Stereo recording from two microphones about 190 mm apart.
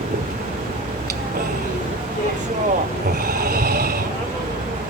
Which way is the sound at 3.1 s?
50° right (ahead or behind).